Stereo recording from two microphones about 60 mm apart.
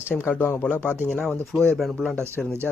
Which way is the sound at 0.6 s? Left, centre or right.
Left.